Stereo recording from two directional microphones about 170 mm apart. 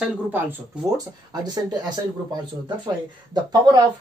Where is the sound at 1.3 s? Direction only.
25° right (ahead or behind).